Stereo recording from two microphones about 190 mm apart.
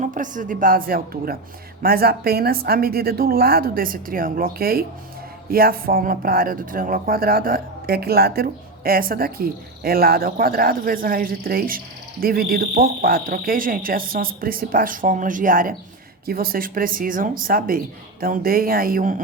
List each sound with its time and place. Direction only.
0.0 s speech: 45° right (ahead or behind)